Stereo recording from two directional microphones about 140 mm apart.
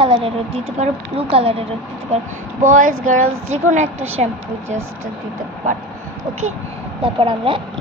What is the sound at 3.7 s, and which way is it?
Speech, 55° right (ahead or behind).